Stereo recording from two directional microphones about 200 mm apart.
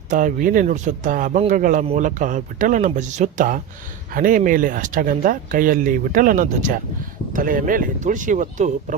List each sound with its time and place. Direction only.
0.1 s speech: 40° right (ahead or behind)